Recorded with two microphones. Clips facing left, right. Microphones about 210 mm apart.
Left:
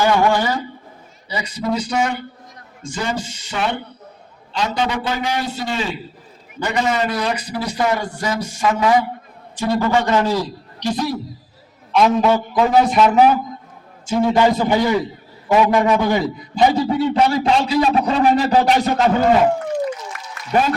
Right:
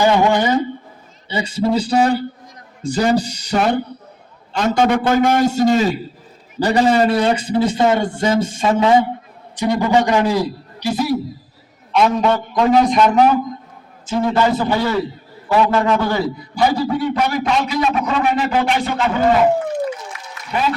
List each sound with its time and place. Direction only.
0.0 s a man's voice: 20° right (ahead or behind); by 19.1 s 40° left (ahead or behind)